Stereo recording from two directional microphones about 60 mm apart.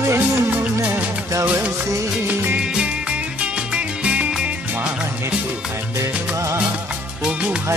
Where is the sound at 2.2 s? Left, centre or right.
Right.